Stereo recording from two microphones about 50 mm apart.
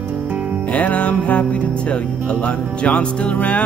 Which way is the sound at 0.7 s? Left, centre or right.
Left.